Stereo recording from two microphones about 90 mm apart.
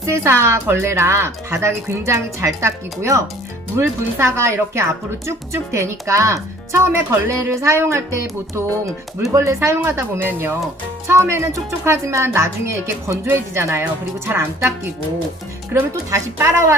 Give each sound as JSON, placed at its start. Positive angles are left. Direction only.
{"t": 0.0, "sound": "a woman's voice", "side_deg": -30}
{"t": 15.7, "sound": "a woman's voice", "side_deg": -30}